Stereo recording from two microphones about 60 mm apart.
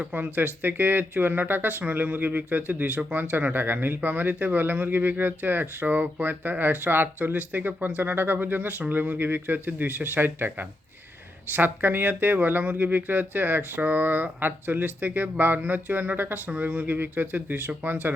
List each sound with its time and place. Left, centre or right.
0.1 s speech: right